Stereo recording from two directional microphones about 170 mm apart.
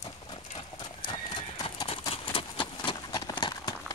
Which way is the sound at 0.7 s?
25° left (ahead or behind).